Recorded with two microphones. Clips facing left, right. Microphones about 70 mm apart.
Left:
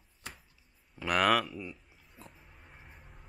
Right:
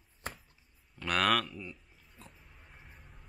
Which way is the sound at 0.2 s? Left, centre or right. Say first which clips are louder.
Right 5 dB; right.